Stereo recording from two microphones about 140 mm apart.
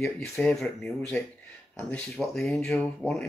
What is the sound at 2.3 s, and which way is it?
Speech, 5° left (ahead or behind).